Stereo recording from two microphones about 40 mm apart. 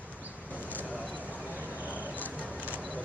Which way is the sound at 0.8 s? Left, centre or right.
Right.